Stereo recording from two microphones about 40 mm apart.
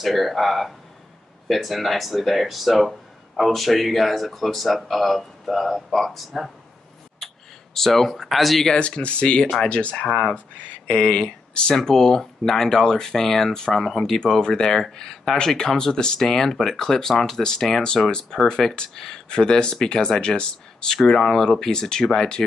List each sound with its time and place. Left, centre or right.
0.0 s speech: centre
7.7 s speech: centre
8.7 s speech: left
10.0 s speech: centre
10.9 s speech: left